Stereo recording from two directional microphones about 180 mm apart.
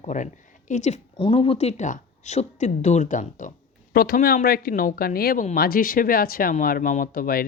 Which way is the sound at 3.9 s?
55° left (ahead or behind).